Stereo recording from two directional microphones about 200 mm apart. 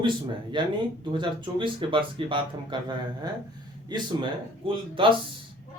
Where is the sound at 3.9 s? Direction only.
20° right (ahead or behind).